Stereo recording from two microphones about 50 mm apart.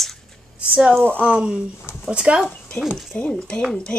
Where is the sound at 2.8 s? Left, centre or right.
Left.